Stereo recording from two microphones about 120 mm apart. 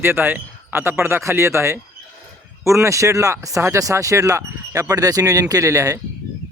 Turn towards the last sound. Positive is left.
turn(degrees=-25)  # may be behind; listen again after turning